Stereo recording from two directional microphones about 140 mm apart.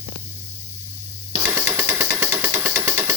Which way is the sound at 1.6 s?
15° right (ahead or behind).